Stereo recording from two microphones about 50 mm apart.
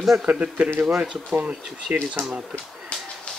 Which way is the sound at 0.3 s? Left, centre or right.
Right.